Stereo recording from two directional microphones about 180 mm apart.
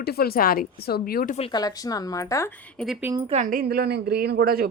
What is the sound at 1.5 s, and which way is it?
Speech, 20° left (ahead or behind).